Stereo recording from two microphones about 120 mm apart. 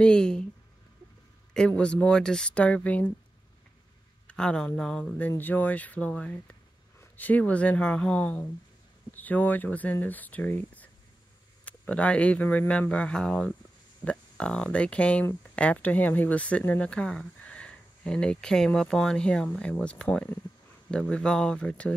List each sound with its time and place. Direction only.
0.0 s speech: 5° left (ahead or behind)
1.5 s speech: 5° left (ahead or behind)
4.3 s speech: 5° left (ahead or behind)